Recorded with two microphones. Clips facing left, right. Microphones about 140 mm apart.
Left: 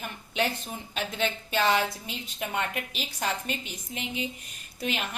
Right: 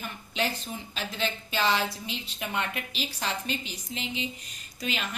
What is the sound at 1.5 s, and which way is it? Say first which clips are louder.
A woman's voice: left 2 dB; 50° left (ahead or behind).